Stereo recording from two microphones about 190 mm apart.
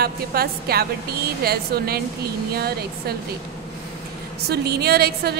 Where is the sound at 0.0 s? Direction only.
55° right (ahead or behind).